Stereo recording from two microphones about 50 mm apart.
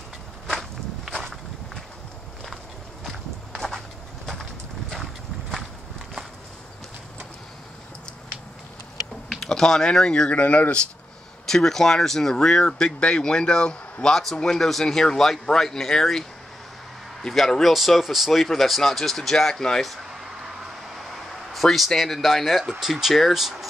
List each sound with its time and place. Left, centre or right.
0.5 s walk: centre
2.4 s walk: centre
4.3 s clip-clop: centre
9.4 s speech: centre
10.4 s speech: left
11.4 s speech: centre
19.8 s a sound: centre